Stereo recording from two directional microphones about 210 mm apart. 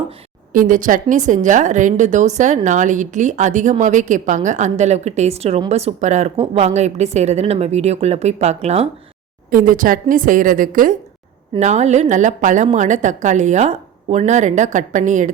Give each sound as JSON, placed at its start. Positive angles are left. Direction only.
{"t": 0.5, "sound": "a woman's voice", "side_deg": -40}
{"t": 9.5, "sound": "a woman's voice", "side_deg": -40}